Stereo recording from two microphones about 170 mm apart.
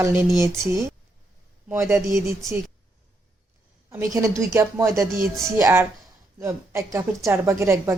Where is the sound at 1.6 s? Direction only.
15° right (ahead or behind).